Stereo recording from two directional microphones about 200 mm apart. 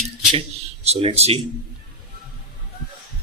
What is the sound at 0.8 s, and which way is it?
Speech, 30° right (ahead or behind).